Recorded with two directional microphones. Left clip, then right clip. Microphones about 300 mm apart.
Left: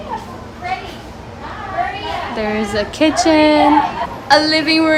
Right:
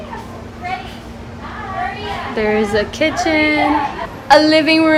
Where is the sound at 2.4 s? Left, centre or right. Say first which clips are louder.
Right 5 dB; centre.